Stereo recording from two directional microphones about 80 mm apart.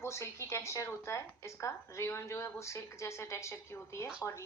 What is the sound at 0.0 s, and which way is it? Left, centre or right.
A woman's voice, left.